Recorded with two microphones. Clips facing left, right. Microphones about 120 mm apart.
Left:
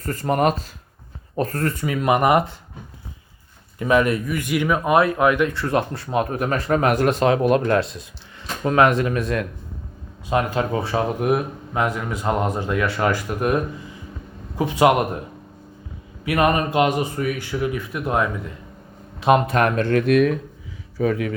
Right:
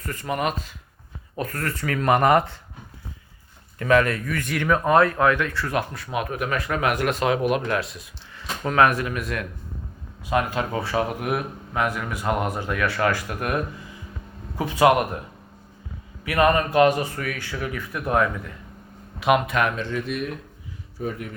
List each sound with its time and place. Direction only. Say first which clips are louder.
0.0 s speech: left 6 dB; 35° left (ahead or behind)
1.7 s speech: right 2 dB; 15° left (ahead or behind)
3.8 s speech: left 1 dB; 15° left (ahead or behind)
16.2 s speech: left 1 dB; 20° left (ahead or behind)
19.2 s speech: left 3 dB; 35° left (ahead or behind)
19.7 s speech: left 11 dB; 60° left (ahead or behind); by 20.4 s 80° left
21.0 s speech: left 9 dB; 90° left